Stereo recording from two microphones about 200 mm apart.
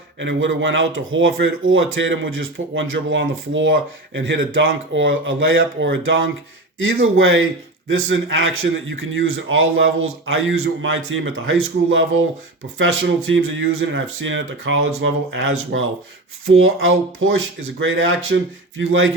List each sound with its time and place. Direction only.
0.2 s speech: 70° right (ahead or behind)